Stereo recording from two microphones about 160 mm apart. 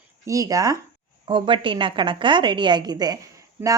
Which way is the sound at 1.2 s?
30° right (ahead or behind).